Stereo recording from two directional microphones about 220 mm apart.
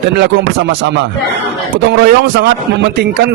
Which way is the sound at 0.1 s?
50° right (ahead or behind).